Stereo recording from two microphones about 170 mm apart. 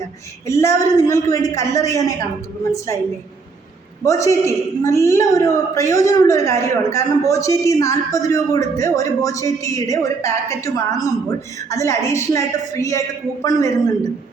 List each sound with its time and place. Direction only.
0.4 s a woman's voice: 15° left (ahead or behind)
4.0 s a woman's voice: 20° left (ahead or behind)